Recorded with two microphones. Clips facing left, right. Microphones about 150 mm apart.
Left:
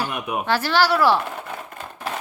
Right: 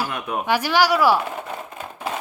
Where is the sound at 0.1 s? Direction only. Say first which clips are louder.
Even; 10° left (ahead or behind).